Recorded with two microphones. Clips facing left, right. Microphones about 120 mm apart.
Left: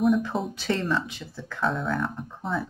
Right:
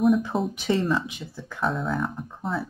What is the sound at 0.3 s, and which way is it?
Speech, centre (ahead or behind).